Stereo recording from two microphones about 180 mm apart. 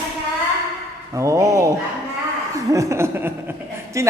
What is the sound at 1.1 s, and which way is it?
A woman's voice, 15° right (ahead or behind).